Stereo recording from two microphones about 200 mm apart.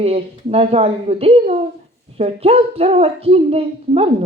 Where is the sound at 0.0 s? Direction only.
30° right (ahead or behind).